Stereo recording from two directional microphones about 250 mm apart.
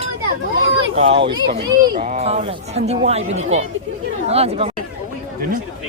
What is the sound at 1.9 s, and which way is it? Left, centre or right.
Speech, right.